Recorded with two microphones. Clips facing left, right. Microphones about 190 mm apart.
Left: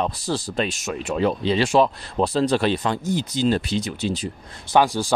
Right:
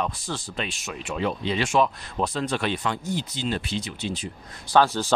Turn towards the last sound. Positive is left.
turn(degrees=15)  # may be behind; listen again after turning